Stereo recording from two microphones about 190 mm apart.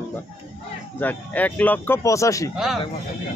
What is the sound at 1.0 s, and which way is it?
Speech, 10° left (ahead or behind).